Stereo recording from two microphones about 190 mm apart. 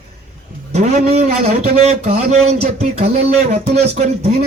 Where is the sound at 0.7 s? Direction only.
35° right (ahead or behind).